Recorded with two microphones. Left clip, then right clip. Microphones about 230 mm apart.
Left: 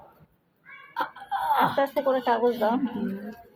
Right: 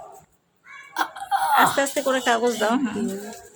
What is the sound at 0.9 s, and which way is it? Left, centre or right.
Speech, right.